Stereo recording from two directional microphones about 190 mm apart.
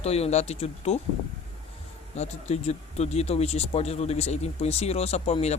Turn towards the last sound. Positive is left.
turn(degrees=35)  # may be behind; listen again after turning